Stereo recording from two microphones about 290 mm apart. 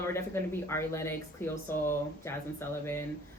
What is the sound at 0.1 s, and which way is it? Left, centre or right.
Speech, centre.